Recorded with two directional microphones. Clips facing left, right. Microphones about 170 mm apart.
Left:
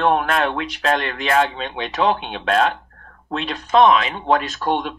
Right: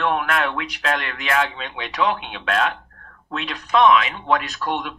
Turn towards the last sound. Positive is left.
turn(degrees=30)  # may be behind; listen again after turning